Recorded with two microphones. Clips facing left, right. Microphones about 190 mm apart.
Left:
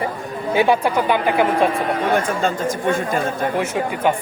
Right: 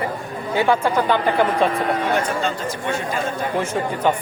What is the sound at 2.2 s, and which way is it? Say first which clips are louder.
Speech: left 3 dB; 50° left (ahead or behind).